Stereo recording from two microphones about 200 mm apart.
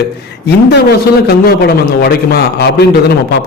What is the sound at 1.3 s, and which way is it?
A man's voice, 50° left (ahead or behind).